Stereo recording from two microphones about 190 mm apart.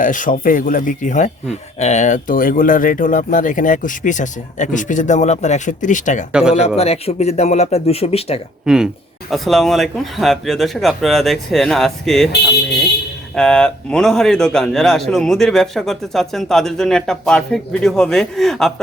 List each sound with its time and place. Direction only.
0.0 s speech: 45° left (ahead or behind)
8.6 s a man's voice: 5° right (ahead or behind)
13.3 s a man's voice: 5° left (ahead or behind)